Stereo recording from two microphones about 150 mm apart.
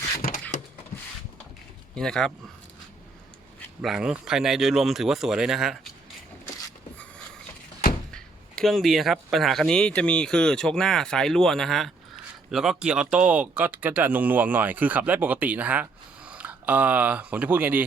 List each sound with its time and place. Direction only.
0.5 s a sound: 55° left (ahead or behind)
2.0 s speech: 5° left (ahead or behind)
3.8 s speech: 5° right (ahead or behind)
8.1 s speech: 5° left (ahead or behind)